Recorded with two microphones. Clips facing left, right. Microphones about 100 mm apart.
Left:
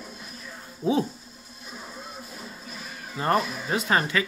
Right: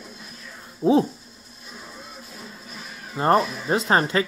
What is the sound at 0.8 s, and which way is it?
Speech, 20° right (ahead or behind).